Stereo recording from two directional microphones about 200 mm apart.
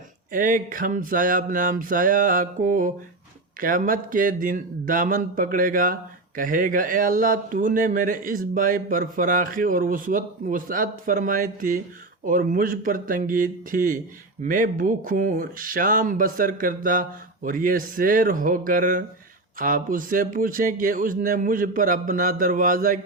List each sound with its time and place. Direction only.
0.3 s speech: 45° right (ahead or behind)